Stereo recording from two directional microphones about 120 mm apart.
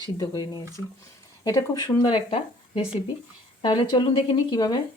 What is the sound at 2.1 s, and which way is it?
Speech, 45° left (ahead or behind).